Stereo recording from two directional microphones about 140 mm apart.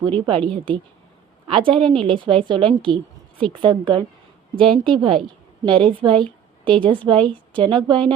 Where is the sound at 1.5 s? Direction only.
40° right (ahead or behind).